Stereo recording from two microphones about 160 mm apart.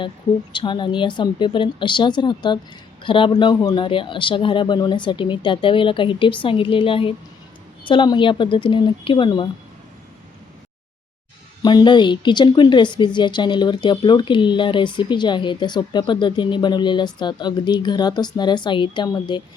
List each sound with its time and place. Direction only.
0.5 s a woman's voice: 30° left (ahead or behind)
11.6 s a woman's voice: 25° left (ahead or behind)